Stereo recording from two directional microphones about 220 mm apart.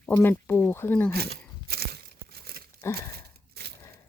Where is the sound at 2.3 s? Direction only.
45° right (ahead or behind).